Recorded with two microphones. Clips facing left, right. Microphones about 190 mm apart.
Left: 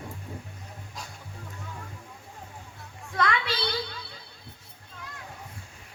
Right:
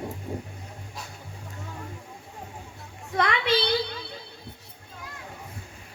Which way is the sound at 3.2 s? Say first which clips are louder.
Right 4 dB; 20° right (ahead or behind).